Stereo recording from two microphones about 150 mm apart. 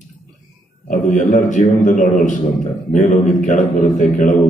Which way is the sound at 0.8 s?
55° left (ahead or behind).